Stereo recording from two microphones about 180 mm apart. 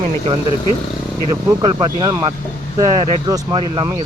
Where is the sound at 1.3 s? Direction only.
25° right (ahead or behind).